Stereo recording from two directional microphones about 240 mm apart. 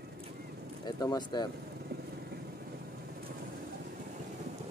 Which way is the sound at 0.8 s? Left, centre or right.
Centre.